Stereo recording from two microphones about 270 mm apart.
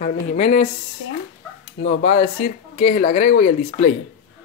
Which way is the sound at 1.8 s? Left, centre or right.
Left.